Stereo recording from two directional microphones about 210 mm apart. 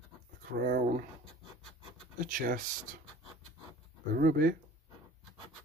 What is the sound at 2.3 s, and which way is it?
Speech, 40° right (ahead or behind).